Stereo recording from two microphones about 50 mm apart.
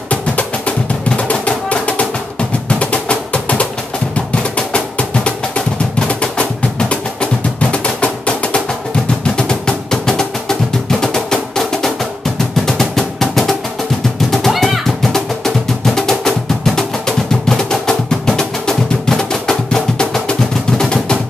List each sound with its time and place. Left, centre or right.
0.1 s music: left
9.2 s percussion: centre
12.6 s drum: centre
14.5 s music: centre
15.1 s music: centre